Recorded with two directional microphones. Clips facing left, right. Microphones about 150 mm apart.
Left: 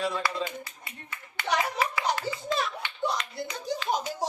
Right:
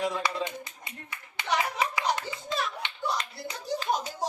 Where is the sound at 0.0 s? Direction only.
15° right (ahead or behind).